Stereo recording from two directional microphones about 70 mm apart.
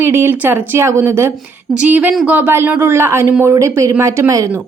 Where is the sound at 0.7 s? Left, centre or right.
Right.